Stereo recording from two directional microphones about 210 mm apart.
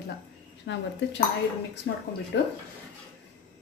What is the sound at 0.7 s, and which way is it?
Speech, 60° left (ahead or behind).